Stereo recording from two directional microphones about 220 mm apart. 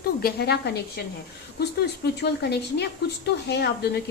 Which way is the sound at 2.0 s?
45° left (ahead or behind).